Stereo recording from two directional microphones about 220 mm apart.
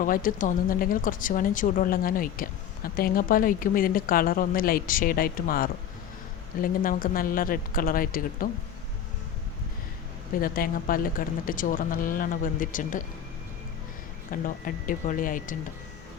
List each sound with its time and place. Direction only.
0.0 s speech: 40° left (ahead or behind)
10.4 s speech: 40° left (ahead or behind)
14.4 s speech: 35° left (ahead or behind)